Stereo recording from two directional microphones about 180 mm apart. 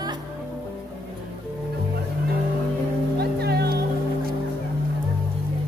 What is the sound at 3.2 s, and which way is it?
Music, 60° right (ahead or behind).